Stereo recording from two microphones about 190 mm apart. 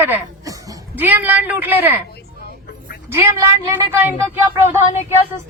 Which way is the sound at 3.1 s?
15° right (ahead or behind).